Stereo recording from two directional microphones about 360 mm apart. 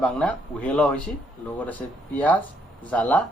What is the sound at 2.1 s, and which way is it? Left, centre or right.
A man's voice, centre.